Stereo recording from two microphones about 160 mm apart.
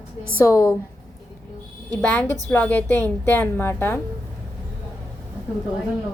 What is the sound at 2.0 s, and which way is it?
A woman's voice, 10° left (ahead or behind).